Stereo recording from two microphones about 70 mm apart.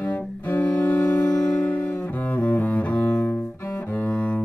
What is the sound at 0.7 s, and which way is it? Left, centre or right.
Music, left.